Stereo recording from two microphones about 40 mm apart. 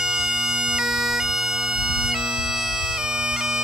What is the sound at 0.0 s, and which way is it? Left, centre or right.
Bagpipes, centre.